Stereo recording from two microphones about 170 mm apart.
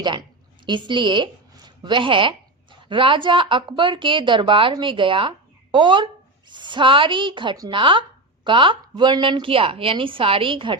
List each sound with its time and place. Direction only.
0.0 s a woman's voice: 25° right (ahead or behind)